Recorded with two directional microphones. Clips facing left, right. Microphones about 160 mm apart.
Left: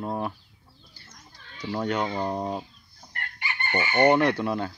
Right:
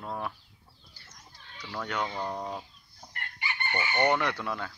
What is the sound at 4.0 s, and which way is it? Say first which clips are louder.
Speech: left 7 dB; 20° left (ahead or behind).